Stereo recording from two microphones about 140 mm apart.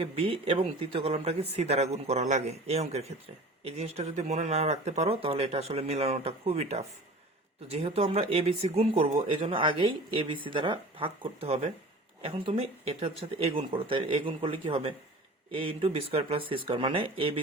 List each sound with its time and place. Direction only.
0.0 s speech: 45° right (ahead or behind)